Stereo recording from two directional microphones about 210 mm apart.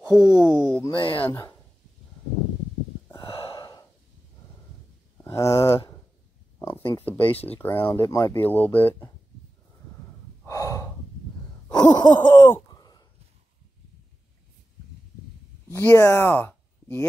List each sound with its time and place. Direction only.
0.0 s speech: 15° left (ahead or behind)
0.8 s speech: 25° left (ahead or behind)
1.2 s speech: 10° left (ahead or behind)
3.1 s gasp: 25° left (ahead or behind)
5.1 s a sound: 15° left (ahead or behind)
5.6 s speech: 15° left (ahead or behind)
10.4 s gasp: 15° left (ahead or behind)
11.7 s groan: 20° left (ahead or behind)
15.7 s speech: 15° left (ahead or behind)